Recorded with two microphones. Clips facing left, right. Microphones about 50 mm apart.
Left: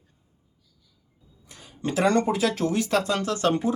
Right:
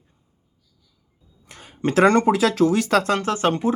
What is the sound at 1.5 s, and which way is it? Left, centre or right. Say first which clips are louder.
Speech: right 6 dB; right.